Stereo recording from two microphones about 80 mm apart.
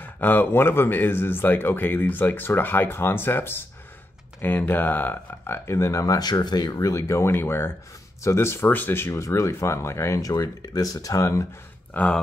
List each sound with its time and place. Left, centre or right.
0.0 s speech: left
11.9 s speech: centre